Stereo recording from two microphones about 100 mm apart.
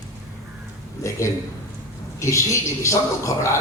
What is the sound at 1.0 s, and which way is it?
A man's voice, 30° left (ahead or behind).